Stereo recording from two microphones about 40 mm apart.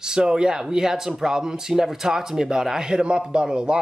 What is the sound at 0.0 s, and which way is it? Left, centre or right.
Speech, centre.